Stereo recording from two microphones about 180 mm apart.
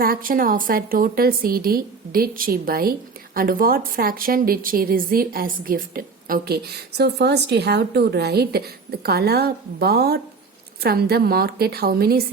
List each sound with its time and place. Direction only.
0.0 s a woman's voice: 55° right (ahead or behind)